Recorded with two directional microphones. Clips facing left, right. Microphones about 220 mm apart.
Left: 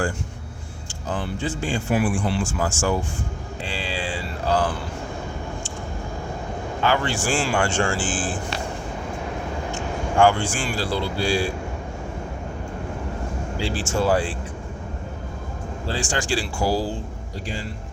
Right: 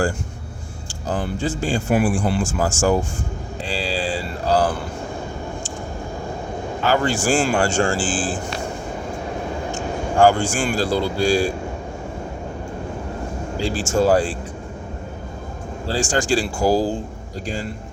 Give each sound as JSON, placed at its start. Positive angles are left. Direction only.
{"t": 1.0, "sound": "a man's voice", "side_deg": -40}
{"t": 3.7, "sound": "a sound", "side_deg": -35}
{"t": 6.9, "sound": "a man's voice", "side_deg": -40}
{"t": 10.2, "sound": "speech", "side_deg": -40}
{"t": 13.6, "sound": "a man's voice", "side_deg": -45}
{"t": 16.0, "sound": "speech", "side_deg": -45}